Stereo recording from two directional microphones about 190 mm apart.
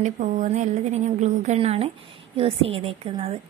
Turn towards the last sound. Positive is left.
turn(degrees=-30)  # may be behind; listen again after turning